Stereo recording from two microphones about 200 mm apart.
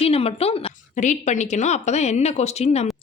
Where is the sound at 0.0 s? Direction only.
30° left (ahead or behind).